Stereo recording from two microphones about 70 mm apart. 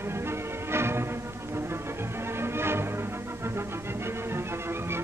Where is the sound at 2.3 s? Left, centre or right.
Right.